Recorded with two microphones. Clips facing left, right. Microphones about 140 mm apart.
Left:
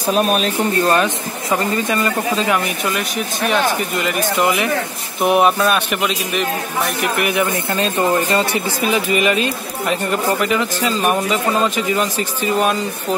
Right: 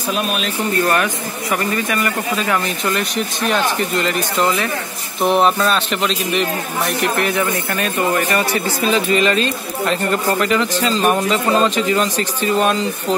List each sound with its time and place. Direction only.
0.1 s speech: 40° left (ahead or behind)
0.8 s speech: 25° left (ahead or behind)
2.9 s speech: 5° left (ahead or behind); by 8.6 s 25° left (ahead or behind)
8.8 s speech: 15° left (ahead or behind)